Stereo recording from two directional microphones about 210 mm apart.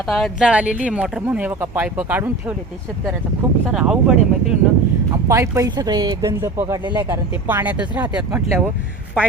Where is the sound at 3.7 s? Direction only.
Centre (ahead or behind).